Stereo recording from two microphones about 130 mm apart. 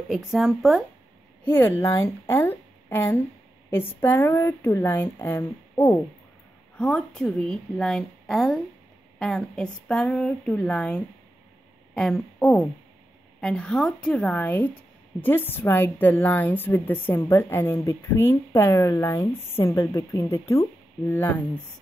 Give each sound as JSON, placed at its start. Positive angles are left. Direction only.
{"t": 0.1, "sound": "speech", "side_deg": 0}
{"t": 1.6, "sound": "speech", "side_deg": 25}
{"t": 6.8, "sound": "speech", "side_deg": 5}